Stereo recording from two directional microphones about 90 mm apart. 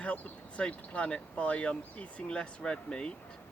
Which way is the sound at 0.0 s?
15° left (ahead or behind).